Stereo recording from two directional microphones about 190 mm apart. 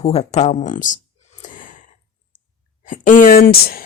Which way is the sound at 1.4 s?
45° left (ahead or behind).